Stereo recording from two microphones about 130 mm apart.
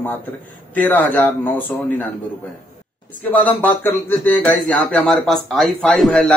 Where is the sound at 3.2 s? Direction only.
15° left (ahead or behind).